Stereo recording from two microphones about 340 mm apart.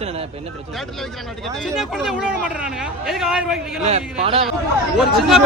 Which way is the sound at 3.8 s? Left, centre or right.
Centre.